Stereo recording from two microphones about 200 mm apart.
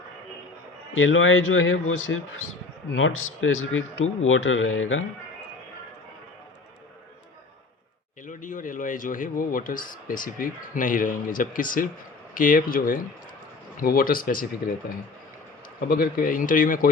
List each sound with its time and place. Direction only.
0.9 s a man's voice: 75° left (ahead or behind)
8.3 s a man's voice: 40° left (ahead or behind)
15.9 s a man's voice: 45° left (ahead or behind)